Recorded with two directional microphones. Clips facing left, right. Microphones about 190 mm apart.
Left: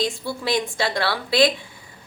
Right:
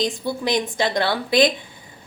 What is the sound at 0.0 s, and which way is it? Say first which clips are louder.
A woman's voice: right 2 dB; 20° right (ahead or behind).